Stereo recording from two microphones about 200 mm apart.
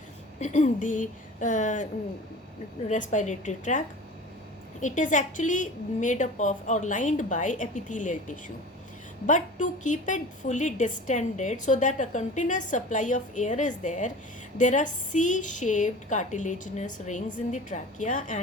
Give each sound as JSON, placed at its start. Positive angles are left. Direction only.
{"t": 0.3, "sound": "a woman's voice", "side_deg": 35}
{"t": 2.9, "sound": "a woman's voice", "side_deg": 40}